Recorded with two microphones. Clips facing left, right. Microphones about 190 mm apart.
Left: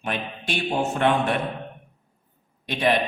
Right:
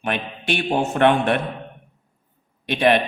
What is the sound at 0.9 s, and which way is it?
Speech, 65° right (ahead or behind).